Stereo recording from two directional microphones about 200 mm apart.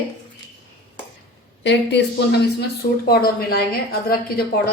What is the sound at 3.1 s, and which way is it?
A woman's voice, 50° left (ahead or behind).